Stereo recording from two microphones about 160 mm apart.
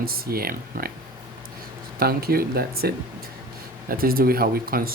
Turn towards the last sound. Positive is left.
turn(degrees=-65)  # may be behind; listen again after turning